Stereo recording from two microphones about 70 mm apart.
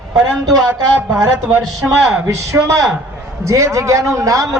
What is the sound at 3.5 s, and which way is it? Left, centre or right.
A man's voice, right.